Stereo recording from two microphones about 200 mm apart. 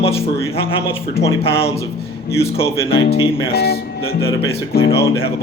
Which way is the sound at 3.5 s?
50° left (ahead or behind).